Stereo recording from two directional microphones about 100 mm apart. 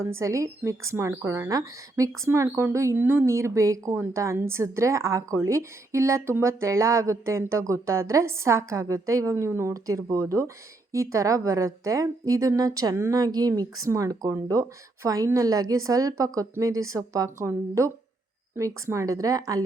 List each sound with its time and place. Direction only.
0.0 s a woman's voice: 30° right (ahead or behind)